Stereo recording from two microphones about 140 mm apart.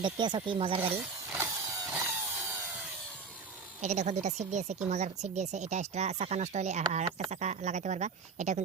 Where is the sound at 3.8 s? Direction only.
55° right (ahead or behind).